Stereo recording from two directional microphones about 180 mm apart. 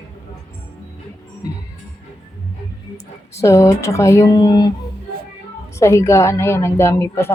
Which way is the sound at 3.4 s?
15° left (ahead or behind).